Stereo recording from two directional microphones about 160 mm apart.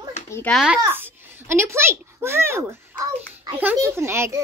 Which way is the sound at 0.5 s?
10° right (ahead or behind).